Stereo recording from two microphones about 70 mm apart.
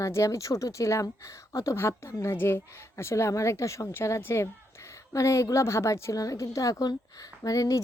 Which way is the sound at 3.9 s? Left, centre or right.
Left.